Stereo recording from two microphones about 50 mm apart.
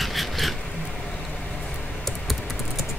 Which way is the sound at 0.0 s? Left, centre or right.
Centre.